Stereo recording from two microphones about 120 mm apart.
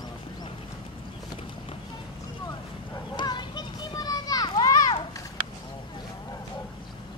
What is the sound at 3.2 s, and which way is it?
Children playing, 40° left (ahead or behind).